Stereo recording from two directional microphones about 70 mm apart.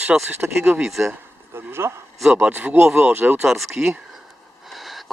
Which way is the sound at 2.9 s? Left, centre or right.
Right.